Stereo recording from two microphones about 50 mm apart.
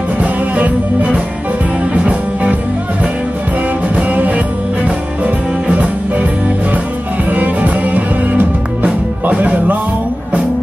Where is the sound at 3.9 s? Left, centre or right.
Right.